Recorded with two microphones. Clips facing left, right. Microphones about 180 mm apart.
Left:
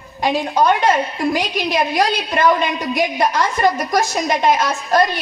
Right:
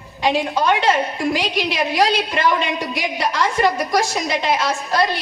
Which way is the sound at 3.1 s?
45° left (ahead or behind).